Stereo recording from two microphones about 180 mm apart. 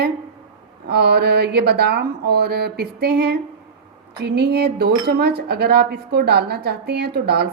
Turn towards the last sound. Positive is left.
turn(degrees=-60)  # may be behind; listen again after turning